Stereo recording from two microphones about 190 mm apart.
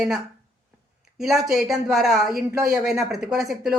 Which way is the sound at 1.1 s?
Centre (ahead or behind).